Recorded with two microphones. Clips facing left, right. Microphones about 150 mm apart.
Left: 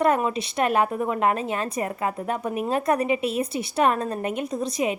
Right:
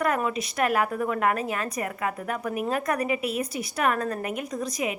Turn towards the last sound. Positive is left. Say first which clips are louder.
# left 4 dB
turn(degrees=30)  # may be behind; listen again after turning